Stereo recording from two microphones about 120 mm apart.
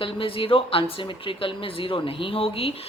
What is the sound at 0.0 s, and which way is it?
A woman's voice, 45° left (ahead or behind).